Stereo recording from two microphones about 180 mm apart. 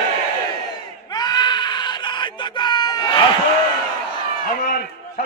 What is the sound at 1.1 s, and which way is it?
Screaming, 25° left (ahead or behind).